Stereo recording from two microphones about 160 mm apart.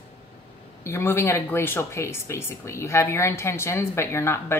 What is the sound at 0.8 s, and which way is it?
Speech, 15° left (ahead or behind).